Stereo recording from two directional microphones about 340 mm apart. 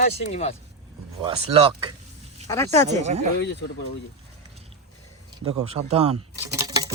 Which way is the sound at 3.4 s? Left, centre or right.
Left.